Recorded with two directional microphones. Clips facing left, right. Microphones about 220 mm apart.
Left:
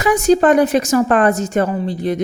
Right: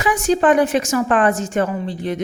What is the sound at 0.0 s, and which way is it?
A woman's voice, 40° left (ahead or behind).